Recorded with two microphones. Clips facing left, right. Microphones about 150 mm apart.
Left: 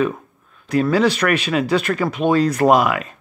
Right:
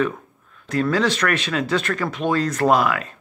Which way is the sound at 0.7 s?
15° left (ahead or behind).